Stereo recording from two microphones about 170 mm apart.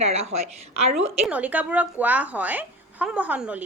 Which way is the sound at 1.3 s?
10° right (ahead or behind).